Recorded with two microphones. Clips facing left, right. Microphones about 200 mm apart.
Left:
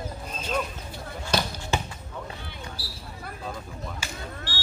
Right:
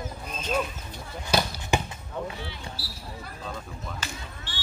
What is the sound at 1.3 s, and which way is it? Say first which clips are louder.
Basketball bounce: right 2 dB; 10° right (ahead or behind).